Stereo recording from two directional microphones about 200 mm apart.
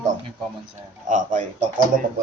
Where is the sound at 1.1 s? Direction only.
40° right (ahead or behind).